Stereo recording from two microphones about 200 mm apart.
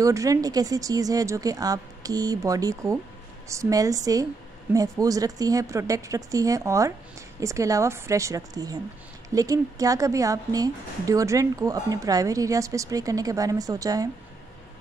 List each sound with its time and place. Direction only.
0.0 s a woman's voice: 15° right (ahead or behind)